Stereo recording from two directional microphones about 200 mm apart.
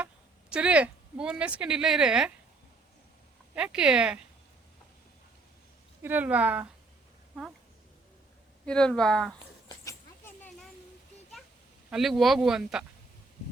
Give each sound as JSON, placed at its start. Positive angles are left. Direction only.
{"t": 0.5, "sound": "speech", "side_deg": -5}
{"t": 3.5, "sound": "speech", "side_deg": -5}
{"t": 6.0, "sound": "speech", "side_deg": -10}
{"t": 8.6, "sound": "speech", "side_deg": 5}
{"t": 9.6, "sound": "a sound", "side_deg": 15}
{"t": 11.9, "sound": "speech", "side_deg": 0}